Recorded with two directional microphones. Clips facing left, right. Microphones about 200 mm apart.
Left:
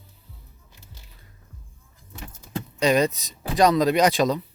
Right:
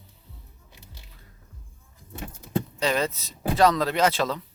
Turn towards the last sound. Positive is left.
turn(degrees=15)  # may be behind; listen again after turning